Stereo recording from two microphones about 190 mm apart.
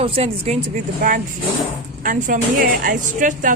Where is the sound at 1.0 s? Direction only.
50° right (ahead or behind).